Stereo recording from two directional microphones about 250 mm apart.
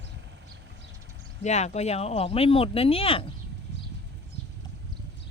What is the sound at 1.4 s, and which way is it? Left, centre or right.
Speech, left.